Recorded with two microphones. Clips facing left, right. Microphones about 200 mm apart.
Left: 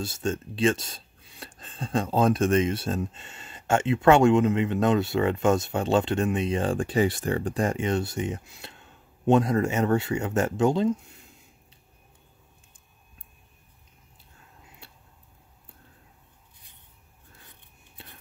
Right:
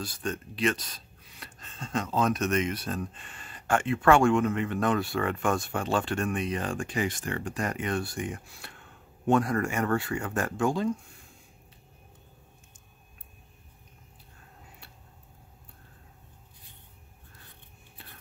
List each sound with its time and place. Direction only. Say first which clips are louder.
0.0 s speech: left 5 dB; 25° left (ahead or behind)